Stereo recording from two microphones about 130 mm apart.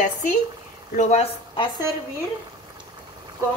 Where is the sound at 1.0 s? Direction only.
60° left (ahead or behind).